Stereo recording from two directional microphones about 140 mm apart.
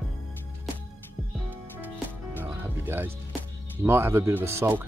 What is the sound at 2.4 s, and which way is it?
Music, 15° right (ahead or behind).